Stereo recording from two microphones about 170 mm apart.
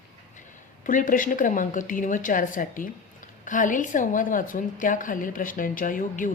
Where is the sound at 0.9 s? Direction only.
50° left (ahead or behind).